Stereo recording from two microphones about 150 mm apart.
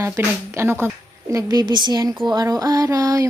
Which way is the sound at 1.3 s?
25° right (ahead or behind).